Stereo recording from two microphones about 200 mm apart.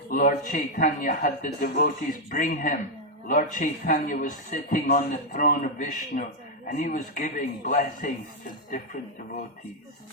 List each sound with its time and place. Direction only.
0.1 s a man's voice: 40° left (ahead or behind)